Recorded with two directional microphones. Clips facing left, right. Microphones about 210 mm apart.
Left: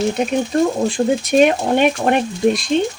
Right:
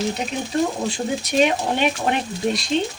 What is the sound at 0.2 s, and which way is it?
Speech, 50° left (ahead or behind).